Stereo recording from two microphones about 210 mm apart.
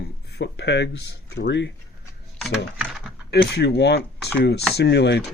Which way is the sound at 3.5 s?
50° left (ahead or behind).